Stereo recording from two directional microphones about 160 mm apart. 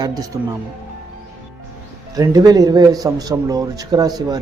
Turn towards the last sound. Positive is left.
turn(degrees=-25)  # may be behind; listen again after turning